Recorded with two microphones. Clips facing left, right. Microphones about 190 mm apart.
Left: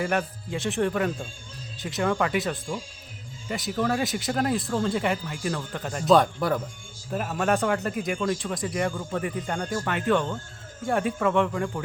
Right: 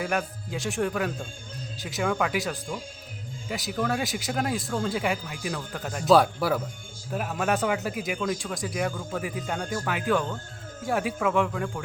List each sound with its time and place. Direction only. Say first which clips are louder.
0.0 s speech: left 2 dB; centre (ahead or behind)